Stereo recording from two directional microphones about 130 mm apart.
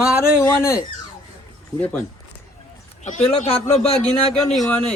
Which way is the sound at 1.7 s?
10° left (ahead or behind).